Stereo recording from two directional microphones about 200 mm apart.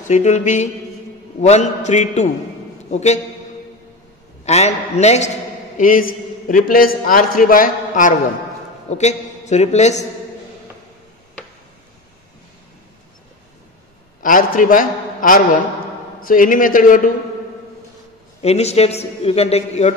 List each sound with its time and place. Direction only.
0.1 s a man's voice: 35° left (ahead or behind)
4.5 s a man's voice: 35° left (ahead or behind)
14.2 s a man's voice: 40° left (ahead or behind)
18.4 s a man's voice: 30° left (ahead or behind)